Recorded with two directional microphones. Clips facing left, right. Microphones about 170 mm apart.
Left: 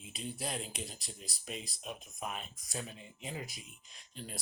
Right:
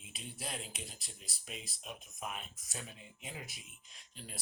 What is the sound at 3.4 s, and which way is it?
Speech, 40° left (ahead or behind).